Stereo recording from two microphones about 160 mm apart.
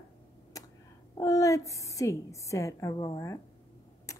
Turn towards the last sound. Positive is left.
turn(degrees=20)  # may be behind; listen again after turning